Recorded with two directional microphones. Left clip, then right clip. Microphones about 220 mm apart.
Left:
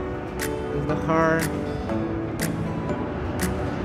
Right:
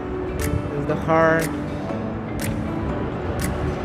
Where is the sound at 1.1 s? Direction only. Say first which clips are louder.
Right 4 dB; centre (ahead or behind).